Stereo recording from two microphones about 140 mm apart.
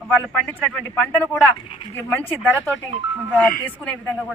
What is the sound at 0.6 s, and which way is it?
Speech, 5° left (ahead or behind).